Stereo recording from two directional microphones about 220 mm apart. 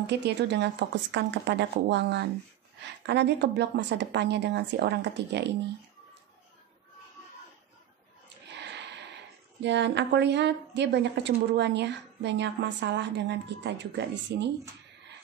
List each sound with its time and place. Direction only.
0.0 s a woman's voice: 50° right (ahead or behind)
8.5 s a sound: 50° right (ahead or behind)
9.6 s a woman's voice: 50° right (ahead or behind)